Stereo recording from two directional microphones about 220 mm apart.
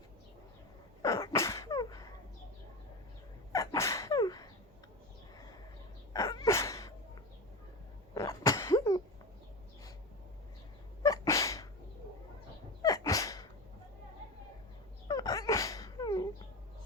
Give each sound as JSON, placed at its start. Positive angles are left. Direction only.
{"t": 1.0, "sound": "sneeze", "side_deg": 15}
{"t": 3.5, "sound": "sneeze", "side_deg": 15}
{"t": 6.1, "sound": "sneeze", "side_deg": 15}
{"t": 8.1, "sound": "sneeze", "side_deg": 15}
{"t": 11.0, "sound": "cat", "side_deg": 15}
{"t": 12.8, "sound": "sneeze", "side_deg": 15}
{"t": 15.0, "sound": "dog", "side_deg": 15}